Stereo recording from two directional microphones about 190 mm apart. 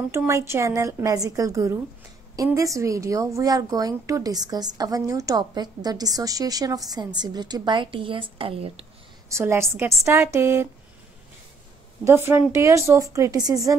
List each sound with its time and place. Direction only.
0.1 s a woman's voice: 15° right (ahead or behind); by 8.8 s 30° right (ahead or behind)
9.3 s a woman's voice: 15° right (ahead or behind)
12.1 s a woman's voice: 15° right (ahead or behind)